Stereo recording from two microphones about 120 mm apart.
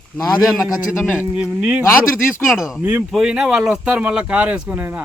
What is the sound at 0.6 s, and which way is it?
Speech, 20° left (ahead or behind).